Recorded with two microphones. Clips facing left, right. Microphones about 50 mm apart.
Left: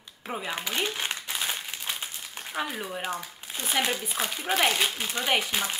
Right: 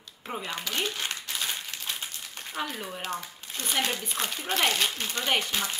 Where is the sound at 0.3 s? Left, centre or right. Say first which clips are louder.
Left 2 dB; centre.